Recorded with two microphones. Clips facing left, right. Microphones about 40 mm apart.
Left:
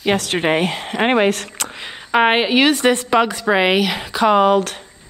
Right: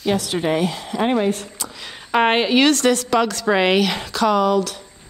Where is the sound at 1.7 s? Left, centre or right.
Left.